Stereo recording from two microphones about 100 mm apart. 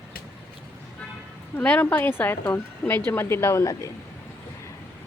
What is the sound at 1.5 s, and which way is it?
Speech, 15° left (ahead or behind).